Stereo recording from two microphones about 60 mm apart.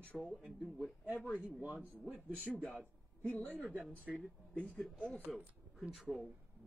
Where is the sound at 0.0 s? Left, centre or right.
Left.